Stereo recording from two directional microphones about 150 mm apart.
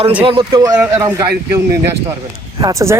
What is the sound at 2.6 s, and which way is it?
Speech, 25° right (ahead or behind).